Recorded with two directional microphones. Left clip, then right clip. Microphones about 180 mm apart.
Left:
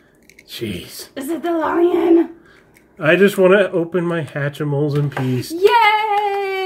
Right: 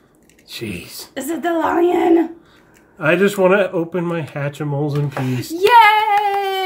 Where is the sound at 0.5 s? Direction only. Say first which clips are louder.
Left 1 dB; 20° left (ahead or behind).